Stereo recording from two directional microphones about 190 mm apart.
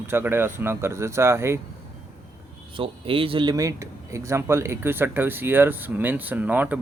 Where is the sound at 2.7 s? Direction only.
30° right (ahead or behind).